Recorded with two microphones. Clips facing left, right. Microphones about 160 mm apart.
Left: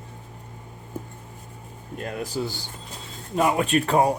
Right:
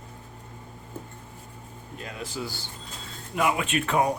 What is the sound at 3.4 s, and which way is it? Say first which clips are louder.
Speech: left 4 dB; 35° left (ahead or behind).